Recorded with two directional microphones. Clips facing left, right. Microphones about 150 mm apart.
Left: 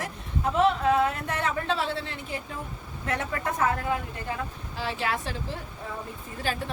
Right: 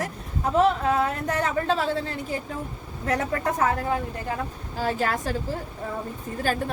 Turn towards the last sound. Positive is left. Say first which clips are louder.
# right 5 dB
turn(degrees=-45)  # may be behind; listen again after turning